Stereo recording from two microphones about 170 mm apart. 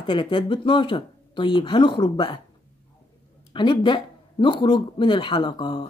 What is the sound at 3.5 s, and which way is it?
Speech, 30° left (ahead or behind).